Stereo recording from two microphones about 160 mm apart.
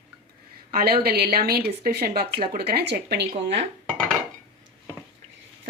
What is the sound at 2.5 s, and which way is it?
Speech, 80° right.